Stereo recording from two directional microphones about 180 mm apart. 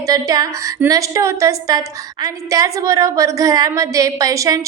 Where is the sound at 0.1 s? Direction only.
20° right (ahead or behind).